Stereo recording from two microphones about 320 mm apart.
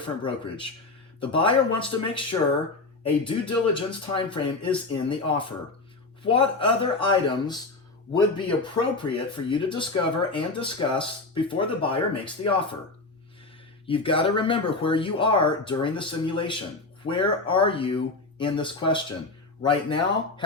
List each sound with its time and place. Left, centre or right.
0.0 s speech: centre
8.7 s speech: centre
13.8 s speech: centre